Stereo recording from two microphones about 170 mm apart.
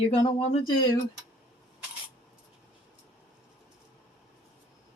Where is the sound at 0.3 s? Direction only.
30° left (ahead or behind).